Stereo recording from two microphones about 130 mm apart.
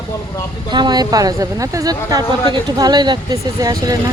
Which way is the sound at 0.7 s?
35° right (ahead or behind).